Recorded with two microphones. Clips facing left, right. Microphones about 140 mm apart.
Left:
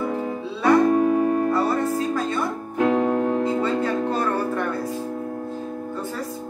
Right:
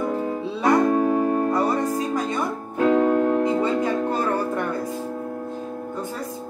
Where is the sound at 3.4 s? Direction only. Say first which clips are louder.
Right 1 dB; 20° right (ahead or behind).